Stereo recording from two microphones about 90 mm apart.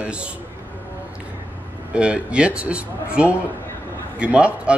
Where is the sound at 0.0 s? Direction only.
15° right (ahead or behind).